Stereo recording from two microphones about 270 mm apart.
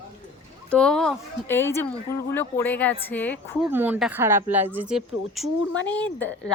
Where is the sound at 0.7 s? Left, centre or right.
Centre.